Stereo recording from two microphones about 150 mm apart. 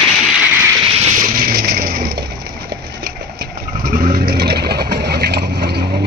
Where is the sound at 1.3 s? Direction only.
80° right.